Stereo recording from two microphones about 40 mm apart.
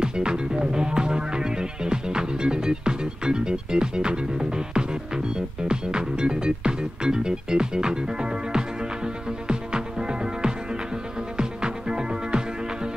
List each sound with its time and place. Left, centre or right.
0.0 s music: right